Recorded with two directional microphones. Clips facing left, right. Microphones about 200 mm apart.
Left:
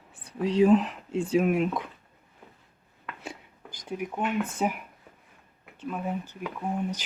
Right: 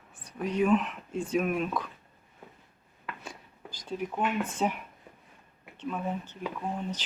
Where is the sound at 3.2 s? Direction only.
20° left (ahead or behind).